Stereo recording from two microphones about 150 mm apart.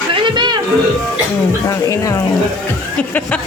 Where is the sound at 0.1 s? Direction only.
35° right (ahead or behind).